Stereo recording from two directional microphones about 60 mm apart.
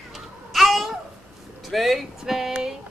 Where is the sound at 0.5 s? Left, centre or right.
Centre.